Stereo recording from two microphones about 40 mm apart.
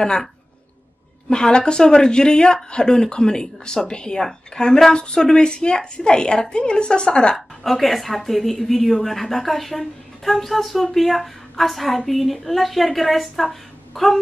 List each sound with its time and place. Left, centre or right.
0.0 s speech: centre
1.3 s speech: centre
7.3 s a woman's voice: centre